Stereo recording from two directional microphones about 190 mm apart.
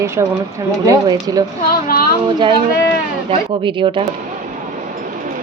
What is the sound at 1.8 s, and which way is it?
Speech, 50° left (ahead or behind).